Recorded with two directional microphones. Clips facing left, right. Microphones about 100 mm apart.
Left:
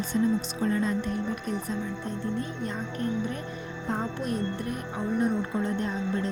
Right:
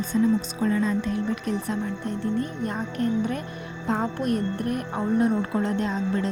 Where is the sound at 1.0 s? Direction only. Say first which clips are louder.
Right 4 dB; 90° right.